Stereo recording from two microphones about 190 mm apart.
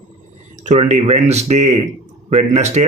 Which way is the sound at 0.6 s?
35° right (ahead or behind).